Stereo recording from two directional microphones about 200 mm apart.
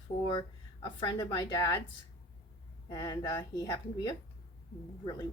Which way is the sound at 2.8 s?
25° left (ahead or behind).